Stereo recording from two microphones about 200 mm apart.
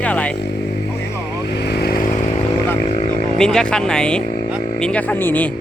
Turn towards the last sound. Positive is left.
turn(degrees=10)  # may be behind; listen again after turning